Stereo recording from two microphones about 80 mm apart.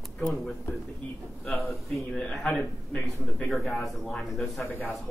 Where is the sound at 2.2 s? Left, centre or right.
Centre.